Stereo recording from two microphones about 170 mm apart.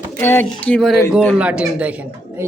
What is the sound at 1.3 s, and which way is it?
A man's voice, 5° right (ahead or behind).